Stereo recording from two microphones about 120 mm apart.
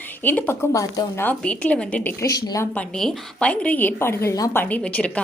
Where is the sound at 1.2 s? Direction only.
10° left (ahead or behind).